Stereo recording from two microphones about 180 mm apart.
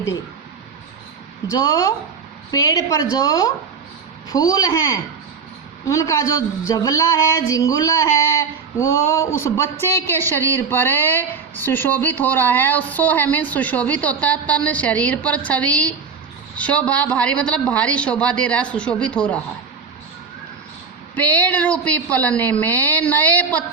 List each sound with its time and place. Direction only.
1.5 s a woman's voice: 20° left (ahead or behind)
21.2 s speech: 10° left (ahead or behind)